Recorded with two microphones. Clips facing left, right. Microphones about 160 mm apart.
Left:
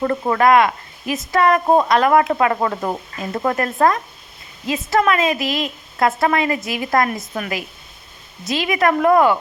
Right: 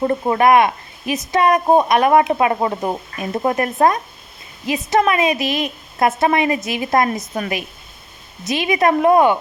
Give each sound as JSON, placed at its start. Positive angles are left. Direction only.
{"t": 0.0, "sound": "speech", "side_deg": -25}